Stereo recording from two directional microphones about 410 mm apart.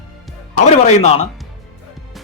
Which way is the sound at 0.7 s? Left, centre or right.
Centre.